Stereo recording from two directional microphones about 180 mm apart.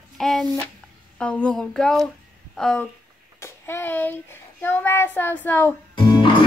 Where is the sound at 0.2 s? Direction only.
Centre (ahead or behind).